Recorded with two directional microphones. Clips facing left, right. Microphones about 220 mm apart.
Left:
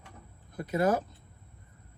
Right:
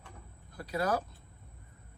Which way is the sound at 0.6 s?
20° left (ahead or behind).